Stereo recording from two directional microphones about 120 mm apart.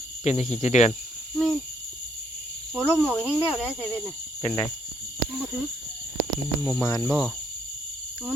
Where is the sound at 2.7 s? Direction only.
10° right (ahead or behind).